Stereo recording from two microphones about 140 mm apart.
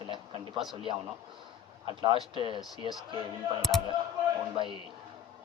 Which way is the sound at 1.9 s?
35° right (ahead or behind).